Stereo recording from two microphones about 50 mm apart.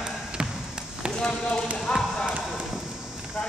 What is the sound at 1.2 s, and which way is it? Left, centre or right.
Speech, centre.